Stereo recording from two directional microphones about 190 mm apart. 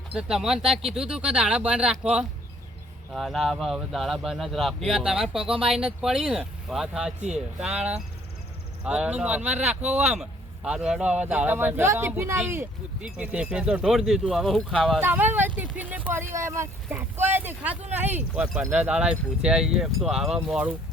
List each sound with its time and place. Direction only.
0.1 s speech: 5° right (ahead or behind)
5.5 s speech: 30° right (ahead or behind)
6.0 s speech: centre (ahead or behind)
9.8 s speech: 35° right (ahead or behind)
10.1 s speech: 5° right (ahead or behind)
15.0 s speech: 10° right (ahead or behind)